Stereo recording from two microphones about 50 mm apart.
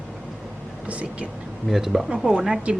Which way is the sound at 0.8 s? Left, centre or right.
Right.